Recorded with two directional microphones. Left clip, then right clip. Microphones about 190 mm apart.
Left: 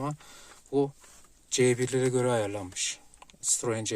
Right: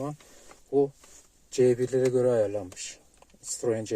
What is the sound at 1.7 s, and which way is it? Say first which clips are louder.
Speech: right 4 dB; centre (ahead or behind).